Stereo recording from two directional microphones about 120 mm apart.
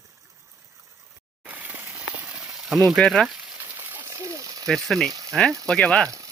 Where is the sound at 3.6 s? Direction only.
15° right (ahead or behind).